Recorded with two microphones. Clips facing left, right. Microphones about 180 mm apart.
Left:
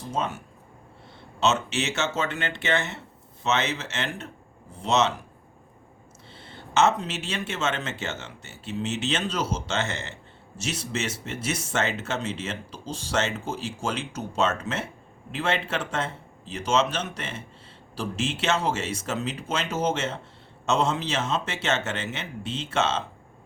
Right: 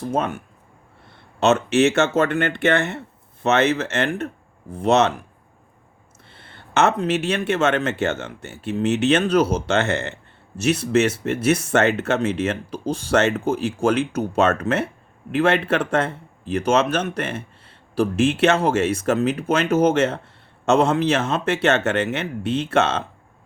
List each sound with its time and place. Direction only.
0.0 s speech: 55° right (ahead or behind)
6.2 s speech: 55° right (ahead or behind)